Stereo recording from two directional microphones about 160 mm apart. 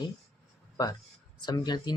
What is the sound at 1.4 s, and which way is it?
Speech, 25° left (ahead or behind).